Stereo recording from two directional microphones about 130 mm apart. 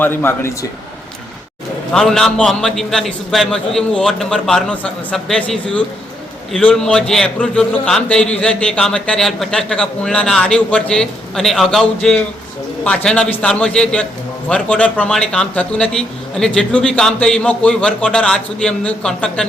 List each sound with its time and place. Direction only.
0.0 s a man's voice: 15° left (ahead or behind)
1.9 s a man's voice: 5° left (ahead or behind)